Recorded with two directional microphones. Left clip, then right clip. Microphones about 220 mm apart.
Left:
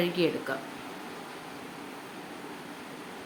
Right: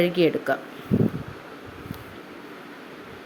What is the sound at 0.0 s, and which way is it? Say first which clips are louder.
Speech: right 7 dB; 25° right (ahead or behind).